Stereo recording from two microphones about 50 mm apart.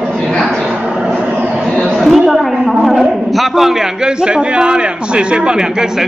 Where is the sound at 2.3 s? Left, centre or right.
Centre.